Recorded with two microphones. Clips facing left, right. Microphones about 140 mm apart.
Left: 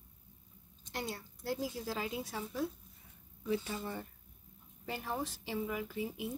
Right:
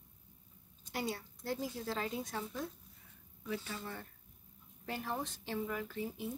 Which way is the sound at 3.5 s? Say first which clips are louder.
Left 5 dB; 20° left (ahead or behind).